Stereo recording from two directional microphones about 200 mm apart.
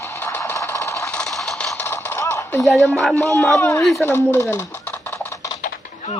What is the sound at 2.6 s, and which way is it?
Speech, centre (ahead or behind).